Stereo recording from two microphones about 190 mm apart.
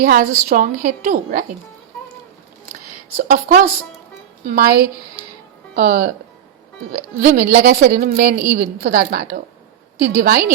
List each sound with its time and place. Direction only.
0.0 s a woman's voice: 50° right (ahead or behind)
3.2 s a woman's voice: 45° right (ahead or behind)